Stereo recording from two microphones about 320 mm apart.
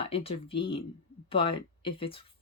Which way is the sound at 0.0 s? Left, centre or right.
Centre.